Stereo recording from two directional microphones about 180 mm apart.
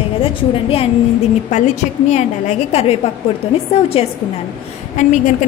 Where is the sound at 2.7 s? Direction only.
35° left (ahead or behind).